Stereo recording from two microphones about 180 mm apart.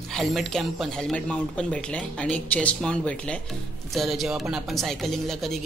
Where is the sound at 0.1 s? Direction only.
Centre (ahead or behind).